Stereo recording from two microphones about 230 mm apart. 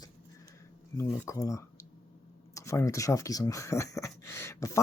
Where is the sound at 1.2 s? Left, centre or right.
Centre.